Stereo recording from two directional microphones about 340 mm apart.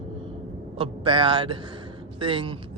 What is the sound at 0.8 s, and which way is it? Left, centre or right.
Speech, centre.